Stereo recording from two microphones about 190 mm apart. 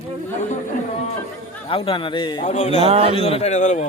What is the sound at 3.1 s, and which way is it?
Speech, 30° left (ahead or behind).